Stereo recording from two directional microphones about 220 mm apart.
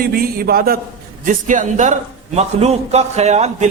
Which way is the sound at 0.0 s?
40° right (ahead or behind).